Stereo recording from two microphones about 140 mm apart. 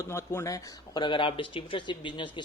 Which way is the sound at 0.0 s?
15° left (ahead or behind).